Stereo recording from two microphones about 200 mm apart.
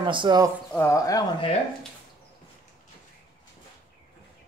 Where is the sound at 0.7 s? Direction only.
15° left (ahead or behind).